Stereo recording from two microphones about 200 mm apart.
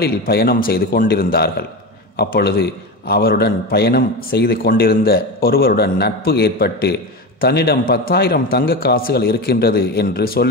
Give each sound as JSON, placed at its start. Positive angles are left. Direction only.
{"t": 0.0, "sound": "a man's voice", "side_deg": 50}